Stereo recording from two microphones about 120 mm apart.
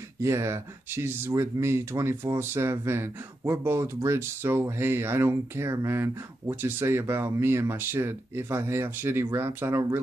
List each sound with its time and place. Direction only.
0.2 s speech: 25° right (ahead or behind)